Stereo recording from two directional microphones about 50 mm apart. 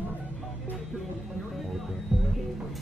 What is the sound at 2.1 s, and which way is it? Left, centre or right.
Music, centre.